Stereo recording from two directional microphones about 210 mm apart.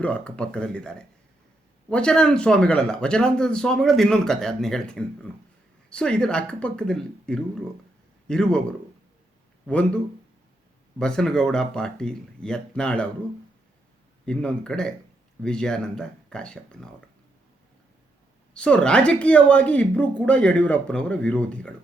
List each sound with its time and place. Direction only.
0.0 s speech: 5° left (ahead or behind)
11.0 s speech: 5° left (ahead or behind)
14.3 s speech: 5° left (ahead or behind)
18.5 s a woman's voice: 5° left (ahead or behind)